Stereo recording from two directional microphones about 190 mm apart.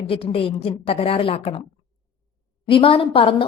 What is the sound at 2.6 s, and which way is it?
Speech, 30° left (ahead or behind).